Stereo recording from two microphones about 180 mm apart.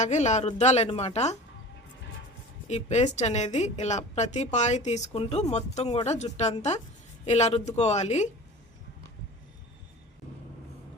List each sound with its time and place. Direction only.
0.0 s a woman's voice: 40° left (ahead or behind)
2.6 s a woman's voice: 40° left (ahead or behind)